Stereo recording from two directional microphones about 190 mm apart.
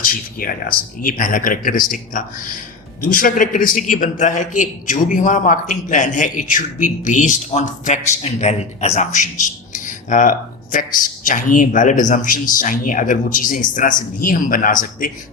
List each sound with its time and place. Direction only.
0.0 s a man's voice: 50° left (ahead or behind)